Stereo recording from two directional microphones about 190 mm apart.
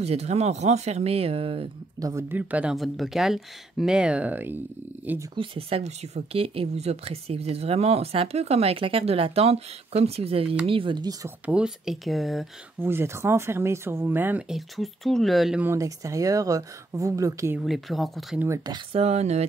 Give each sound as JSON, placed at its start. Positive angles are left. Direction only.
{"t": 0.0, "sound": "speech", "side_deg": -35}
{"t": 2.0, "sound": "speech", "side_deg": -15}
{"t": 5.3, "sound": "speech", "side_deg": -30}
{"t": 11.4, "sound": "speech", "side_deg": -5}
{"t": 12.7, "sound": "speech", "side_deg": -10}
{"t": 17.6, "sound": "speech", "side_deg": 0}
{"t": 18.4, "sound": "speech", "side_deg": -15}
{"t": 18.9, "sound": "speech", "side_deg": -30}